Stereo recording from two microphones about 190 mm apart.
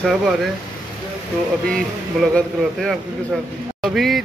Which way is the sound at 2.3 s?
5° left (ahead or behind).